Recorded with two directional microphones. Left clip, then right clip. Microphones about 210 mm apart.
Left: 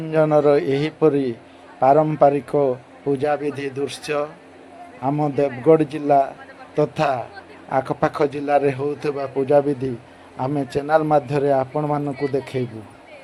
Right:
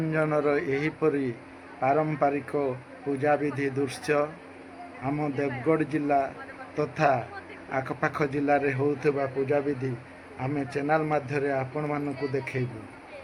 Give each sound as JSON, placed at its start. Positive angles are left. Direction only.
{"t": 0.1, "sound": "a man's voice", "side_deg": 30}